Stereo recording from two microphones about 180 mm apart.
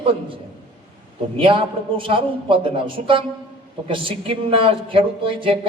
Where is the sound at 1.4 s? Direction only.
30° right (ahead or behind).